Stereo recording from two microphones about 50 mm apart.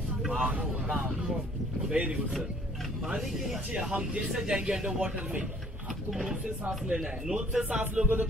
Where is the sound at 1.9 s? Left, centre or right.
Right.